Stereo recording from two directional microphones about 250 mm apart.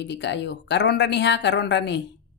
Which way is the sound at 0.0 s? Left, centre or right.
Left.